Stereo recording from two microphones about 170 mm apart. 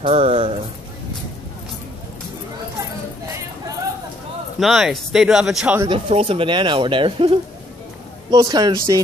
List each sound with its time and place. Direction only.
0.0 s speech: 40° right (ahead or behind)
4.6 s speech: centre (ahead or behind)
5.8 s speech: 30° right (ahead or behind)